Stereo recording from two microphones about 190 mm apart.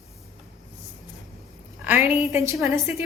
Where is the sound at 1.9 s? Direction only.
10° right (ahead or behind).